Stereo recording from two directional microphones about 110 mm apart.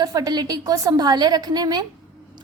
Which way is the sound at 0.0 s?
35° right (ahead or behind).